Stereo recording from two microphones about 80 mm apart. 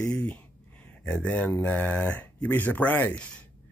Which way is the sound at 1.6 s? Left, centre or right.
Left.